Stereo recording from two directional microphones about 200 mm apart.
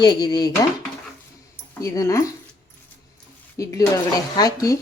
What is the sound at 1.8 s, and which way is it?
Speech, 15° left (ahead or behind).